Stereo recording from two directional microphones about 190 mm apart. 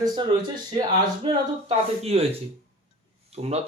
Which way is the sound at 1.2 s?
30° right (ahead or behind).